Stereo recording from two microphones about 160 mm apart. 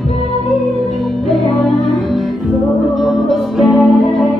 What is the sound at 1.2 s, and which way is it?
Music, centre (ahead or behind).